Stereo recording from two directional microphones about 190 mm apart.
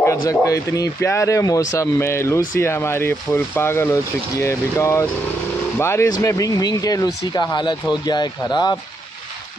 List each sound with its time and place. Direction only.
0.0 s a man's voice: 15° left (ahead or behind)